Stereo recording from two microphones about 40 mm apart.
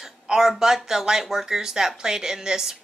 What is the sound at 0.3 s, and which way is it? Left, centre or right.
Speech, centre.